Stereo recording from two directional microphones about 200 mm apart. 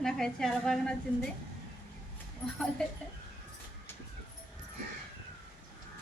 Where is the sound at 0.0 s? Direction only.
5° left (ahead or behind).